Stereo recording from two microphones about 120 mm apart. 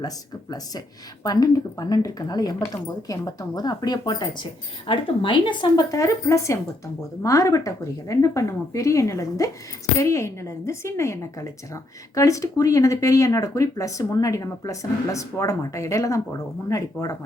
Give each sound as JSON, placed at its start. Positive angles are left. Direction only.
{"t": 1.2, "sound": "a woman's voice", "side_deg": 30}